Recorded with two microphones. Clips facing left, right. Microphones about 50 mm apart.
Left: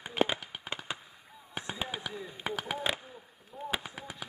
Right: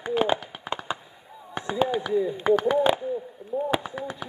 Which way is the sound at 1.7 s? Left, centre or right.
Centre.